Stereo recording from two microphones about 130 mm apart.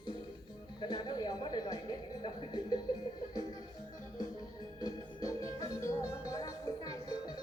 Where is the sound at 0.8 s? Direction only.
35° left (ahead or behind).